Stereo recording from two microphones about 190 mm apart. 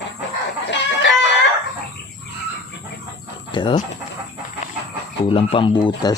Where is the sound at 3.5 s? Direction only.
25° left (ahead or behind).